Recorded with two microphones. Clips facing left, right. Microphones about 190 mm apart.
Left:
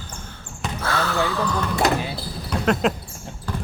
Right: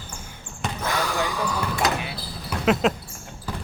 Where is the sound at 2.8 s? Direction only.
Centre (ahead or behind).